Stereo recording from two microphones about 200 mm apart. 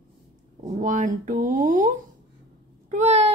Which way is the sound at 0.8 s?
40° right (ahead or behind).